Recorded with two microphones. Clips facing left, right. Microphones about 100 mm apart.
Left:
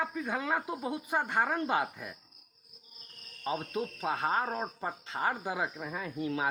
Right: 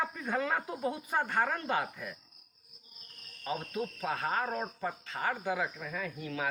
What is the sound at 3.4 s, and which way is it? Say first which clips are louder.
Speech: left 2 dB; 20° left (ahead or behind).